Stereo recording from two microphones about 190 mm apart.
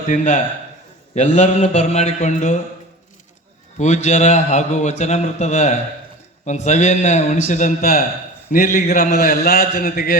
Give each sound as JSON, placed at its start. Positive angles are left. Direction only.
{"t": 0.1, "sound": "a man's voice", "side_deg": 40}
{"t": 3.8, "sound": "a man's voice", "side_deg": 35}